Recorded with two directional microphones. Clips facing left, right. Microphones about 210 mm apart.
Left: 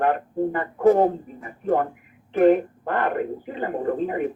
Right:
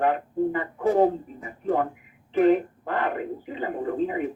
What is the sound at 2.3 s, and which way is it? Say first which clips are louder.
Radio: left 2 dB; 55° left (ahead or behind).